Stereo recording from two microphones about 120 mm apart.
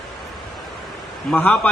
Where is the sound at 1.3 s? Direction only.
10° left (ahead or behind).